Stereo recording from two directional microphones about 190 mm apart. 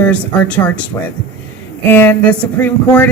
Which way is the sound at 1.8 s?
10° left (ahead or behind).